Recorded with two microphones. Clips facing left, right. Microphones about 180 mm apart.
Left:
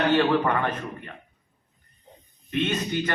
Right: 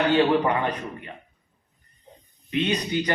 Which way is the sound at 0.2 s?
15° right (ahead or behind).